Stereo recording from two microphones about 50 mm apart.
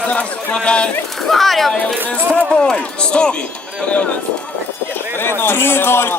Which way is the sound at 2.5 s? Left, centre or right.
Centre.